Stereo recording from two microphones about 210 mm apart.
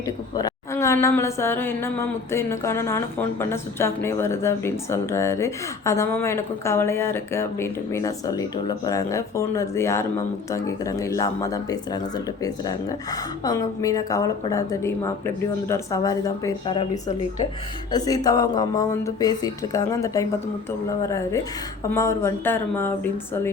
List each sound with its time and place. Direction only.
0.0 s a woman's voice: 15° left (ahead or behind)
21.9 s a woman's voice: 15° left (ahead or behind)